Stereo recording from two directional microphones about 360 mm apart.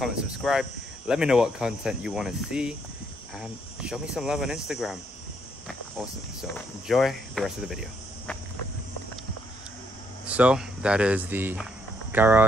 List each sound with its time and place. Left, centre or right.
0.0 s speech: centre
6.9 s speech: centre
10.2 s speech: centre